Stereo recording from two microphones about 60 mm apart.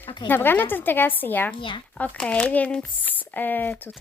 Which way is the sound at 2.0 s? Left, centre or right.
Centre.